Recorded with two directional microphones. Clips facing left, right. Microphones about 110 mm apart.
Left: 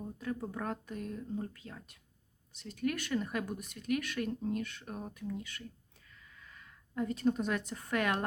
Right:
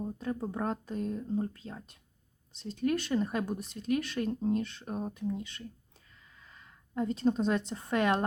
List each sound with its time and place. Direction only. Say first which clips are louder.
0.0 s a woman's voice: right 4 dB; 30° right (ahead or behind)